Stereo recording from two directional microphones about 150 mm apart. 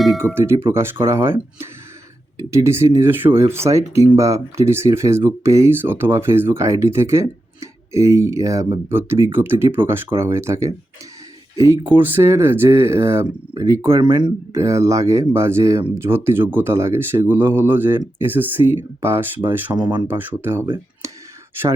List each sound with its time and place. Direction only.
0.3 s speech: 15° right (ahead or behind)
14.6 s speech: 20° right (ahead or behind)
19.7 s speech: 30° right (ahead or behind)
20.1 s speech: 15° right (ahead or behind)